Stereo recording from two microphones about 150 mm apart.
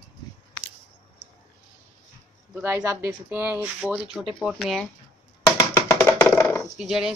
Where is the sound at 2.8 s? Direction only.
15° right (ahead or behind).